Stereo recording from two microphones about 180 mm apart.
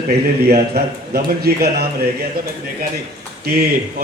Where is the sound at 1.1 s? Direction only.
60° right (ahead or behind).